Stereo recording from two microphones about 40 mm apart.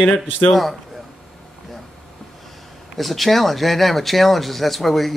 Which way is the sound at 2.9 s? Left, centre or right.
Centre.